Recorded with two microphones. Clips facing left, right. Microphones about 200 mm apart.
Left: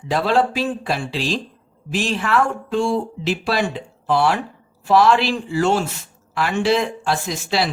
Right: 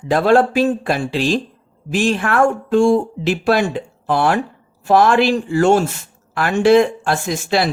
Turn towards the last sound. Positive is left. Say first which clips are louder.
# right 4 dB
turn(degrees=-50)  # may be behind; listen again after turning